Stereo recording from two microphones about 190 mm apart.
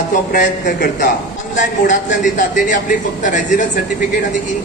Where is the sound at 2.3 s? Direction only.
40° left (ahead or behind).